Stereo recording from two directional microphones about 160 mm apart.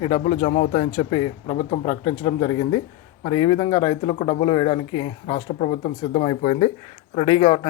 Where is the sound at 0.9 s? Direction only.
30° left (ahead or behind).